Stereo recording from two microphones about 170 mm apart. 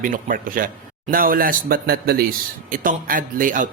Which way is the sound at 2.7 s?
55° right (ahead or behind).